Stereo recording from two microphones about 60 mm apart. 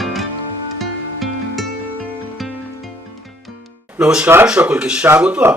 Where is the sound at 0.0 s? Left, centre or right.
Centre.